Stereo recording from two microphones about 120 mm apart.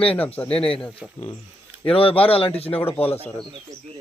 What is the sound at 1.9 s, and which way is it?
Speech, 50° left (ahead or behind).